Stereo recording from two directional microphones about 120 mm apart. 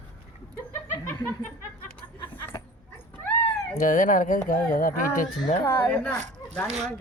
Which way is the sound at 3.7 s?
90° left.